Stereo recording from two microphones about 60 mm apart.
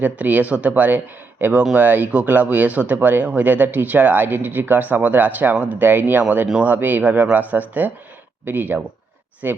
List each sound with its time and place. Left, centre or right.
0.0 s speech: right